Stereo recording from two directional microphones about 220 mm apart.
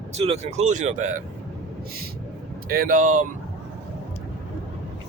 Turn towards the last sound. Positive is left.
turn(degrees=-35)  # may be behind; listen again after turning